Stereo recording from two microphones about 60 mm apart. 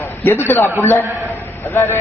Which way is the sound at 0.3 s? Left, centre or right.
Left.